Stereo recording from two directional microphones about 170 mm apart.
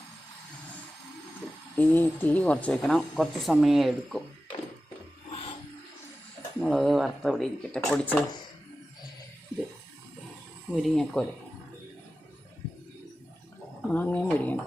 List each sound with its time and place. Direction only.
1.7 s speech: 10° left (ahead or behind)
5.3 s a sound: 35° left (ahead or behind)
6.6 s speech: centre (ahead or behind)
10.8 s speech: centre (ahead or behind)
13.8 s speech: 10° left (ahead or behind)